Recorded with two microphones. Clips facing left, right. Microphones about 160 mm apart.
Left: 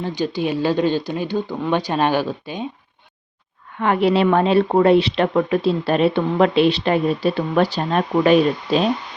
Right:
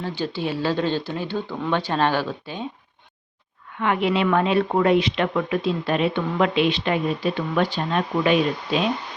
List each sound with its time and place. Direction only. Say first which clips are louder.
0.0 s speech: left 4 dB; 15° left (ahead or behind)
3.8 s speech: left 5 dB; 40° left (ahead or behind)